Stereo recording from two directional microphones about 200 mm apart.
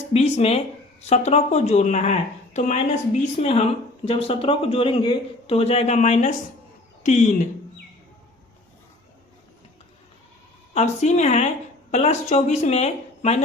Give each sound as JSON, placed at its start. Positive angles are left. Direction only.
{"t": 0.1, "sound": "speech", "side_deg": 30}
{"t": 10.8, "sound": "speech", "side_deg": 35}